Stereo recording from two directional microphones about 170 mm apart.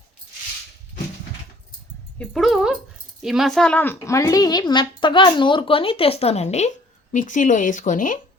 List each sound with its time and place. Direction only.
2.1 s speech: centre (ahead or behind); by 8.2 s 50° left (ahead or behind)